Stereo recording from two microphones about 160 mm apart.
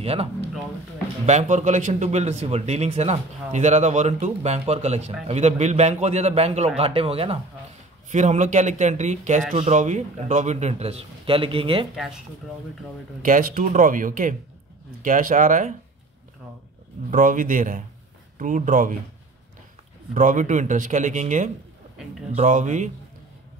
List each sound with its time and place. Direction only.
0.0 s a man's voice: 40° right (ahead or behind)
8.1 s a man's voice: 50° right (ahead or behind); by 11.9 s 35° right (ahead or behind)
11.9 s speech: centre (ahead or behind)
13.2 s a man's voice: 60° right (ahead or behind)
17.1 s speech: 55° right (ahead or behind)
20.2 s a man's voice: 50° right (ahead or behind)